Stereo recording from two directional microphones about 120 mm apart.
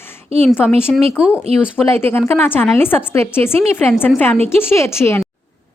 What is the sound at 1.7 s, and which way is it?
A woman's voice, 20° left (ahead or behind).